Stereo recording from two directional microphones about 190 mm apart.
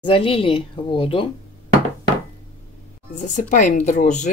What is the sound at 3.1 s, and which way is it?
Speech, 40° left (ahead or behind).